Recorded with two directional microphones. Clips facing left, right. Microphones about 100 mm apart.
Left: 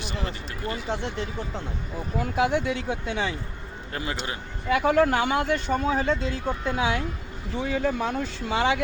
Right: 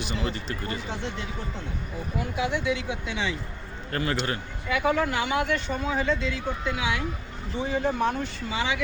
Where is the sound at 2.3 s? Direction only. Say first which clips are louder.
Left 3 dB; 40° left (ahead or behind).